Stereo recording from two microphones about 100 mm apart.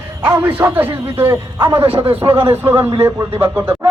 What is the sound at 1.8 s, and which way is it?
Speech, 65° right (ahead or behind).